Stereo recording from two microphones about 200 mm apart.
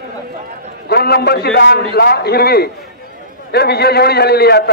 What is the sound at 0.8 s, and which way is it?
A man's voice, 50° left (ahead or behind).